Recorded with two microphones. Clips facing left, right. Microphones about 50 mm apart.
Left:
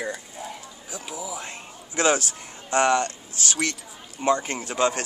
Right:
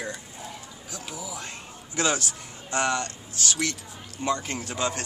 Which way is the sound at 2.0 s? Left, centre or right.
Left.